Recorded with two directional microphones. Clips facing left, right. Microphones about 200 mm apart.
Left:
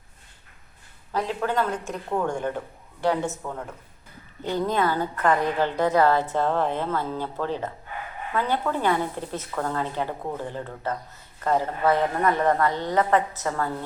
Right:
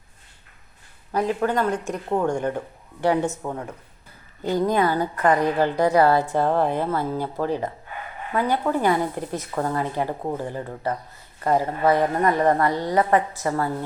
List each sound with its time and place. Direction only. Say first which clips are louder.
1.3 s a woman's voice: right 3 dB; 15° right (ahead or behind)
4.4 s a woman's voice: right 3 dB; 15° right (ahead or behind)